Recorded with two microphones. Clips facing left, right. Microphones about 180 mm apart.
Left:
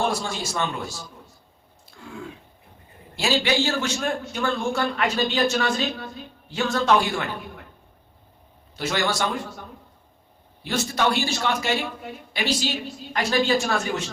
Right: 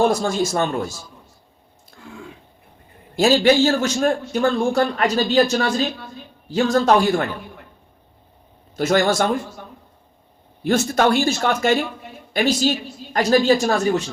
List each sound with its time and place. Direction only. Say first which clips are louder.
0.1 s a man's voice: right 8 dB; 45° right (ahead or behind)
3.2 s a man's voice: right 8 dB; 45° right (ahead or behind)
8.7 s a man's voice: right 8 dB; 45° right (ahead or behind)
10.6 s a man's voice: right 7 dB; 50° right (ahead or behind)